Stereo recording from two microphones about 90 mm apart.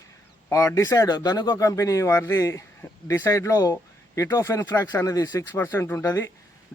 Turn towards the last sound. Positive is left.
turn(degrees=30)  # may be behind; listen again after turning